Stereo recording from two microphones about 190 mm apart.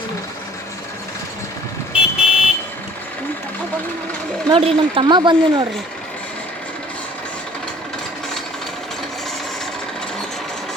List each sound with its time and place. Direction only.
1.9 s car alarm: 5° right (ahead or behind)
4.4 s speech: 25° right (ahead or behind)